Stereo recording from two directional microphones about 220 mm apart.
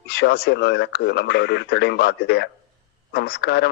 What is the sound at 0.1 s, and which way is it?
Speech, 50° left (ahead or behind).